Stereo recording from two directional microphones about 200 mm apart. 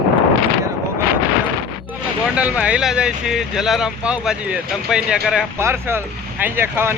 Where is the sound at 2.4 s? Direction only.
5° right (ahead or behind).